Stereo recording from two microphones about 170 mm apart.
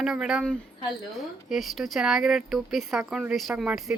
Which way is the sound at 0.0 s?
5° right (ahead or behind).